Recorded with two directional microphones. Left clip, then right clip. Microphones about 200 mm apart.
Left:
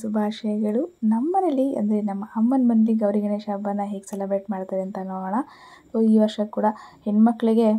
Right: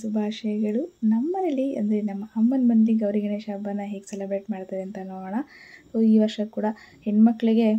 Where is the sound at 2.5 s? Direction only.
55° left (ahead or behind).